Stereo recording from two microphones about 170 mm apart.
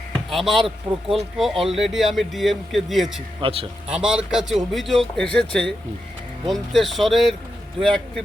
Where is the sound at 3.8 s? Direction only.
5° right (ahead or behind).